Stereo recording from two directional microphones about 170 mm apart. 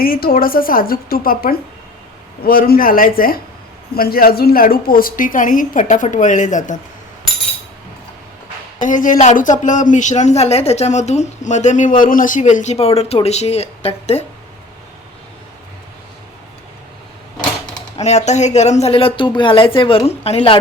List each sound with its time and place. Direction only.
0.0 s a woman's voice: 60° left (ahead or behind)
8.8 s a woman's voice: 50° left (ahead or behind)
17.9 s speech: 40° left (ahead or behind)